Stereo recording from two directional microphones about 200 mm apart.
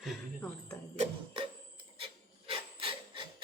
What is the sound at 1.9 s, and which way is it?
Filing, 25° right (ahead or behind).